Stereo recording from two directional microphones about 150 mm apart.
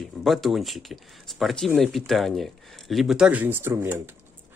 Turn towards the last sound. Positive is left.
turn(degrees=-15)  # may be behind; listen again after turning